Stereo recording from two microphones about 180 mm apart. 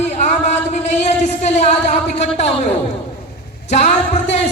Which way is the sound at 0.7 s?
40° left (ahead or behind).